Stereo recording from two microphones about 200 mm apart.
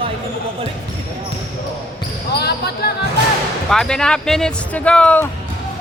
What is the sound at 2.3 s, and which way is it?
Speech, 55° left (ahead or behind).